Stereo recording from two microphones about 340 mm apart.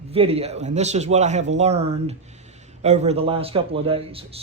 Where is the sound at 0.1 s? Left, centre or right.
Centre.